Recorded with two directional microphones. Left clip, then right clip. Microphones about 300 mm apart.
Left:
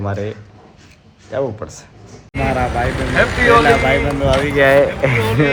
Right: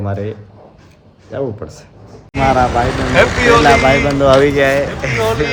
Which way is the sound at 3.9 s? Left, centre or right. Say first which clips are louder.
Right 5 dB; centre.